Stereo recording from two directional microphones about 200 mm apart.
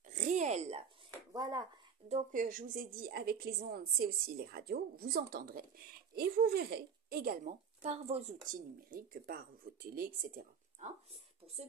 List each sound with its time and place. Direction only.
0.1 s a sound: 35° right (ahead or behind)
1.3 s speech: 20° right (ahead or behind)
2.0 s a woman's voice: 40° right (ahead or behind)
7.8 s speech: 35° right (ahead or behind)
8.5 s a woman's voice: 45° right (ahead or behind)